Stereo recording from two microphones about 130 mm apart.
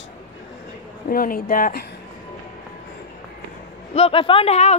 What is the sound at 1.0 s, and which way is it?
Speech, 90° left.